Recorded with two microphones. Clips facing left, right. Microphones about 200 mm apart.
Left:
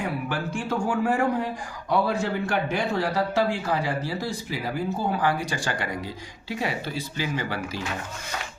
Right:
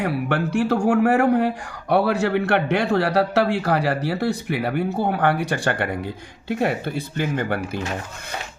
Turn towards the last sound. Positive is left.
turn(degrees=-55)  # may be behind; listen again after turning